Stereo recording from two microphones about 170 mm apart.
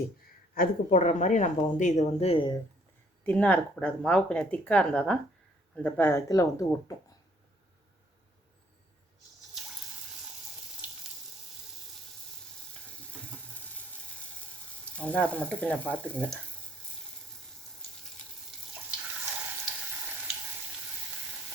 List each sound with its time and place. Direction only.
0.5 s speech: 55° left (ahead or behind); by 2.5 s 35° left (ahead or behind)
3.2 s speech: 10° left (ahead or behind)
14.9 s speech: 10° left (ahead or behind)